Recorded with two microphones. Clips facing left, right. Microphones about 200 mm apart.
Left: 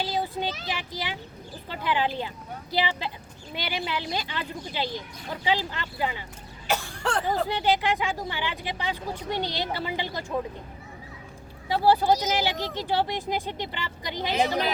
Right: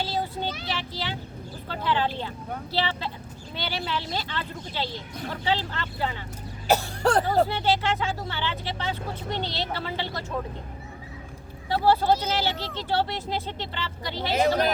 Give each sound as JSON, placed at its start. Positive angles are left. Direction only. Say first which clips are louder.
{"t": 0.0, "sound": "child singing", "louder": "left 1 dB", "side_deg": 15}
{"t": 1.6, "sound": "speech", "louder": "right 1 dB", "side_deg": 15}
{"t": 6.7, "sound": "cough", "louder": "right 6 dB", "side_deg": -40}
{"t": 7.4, "sound": "speech", "louder": "even", "side_deg": 15}
{"t": 11.7, "sound": "speech", "louder": "even", "side_deg": 15}